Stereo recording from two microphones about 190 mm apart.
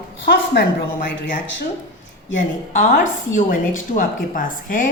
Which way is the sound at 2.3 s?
40° left (ahead or behind).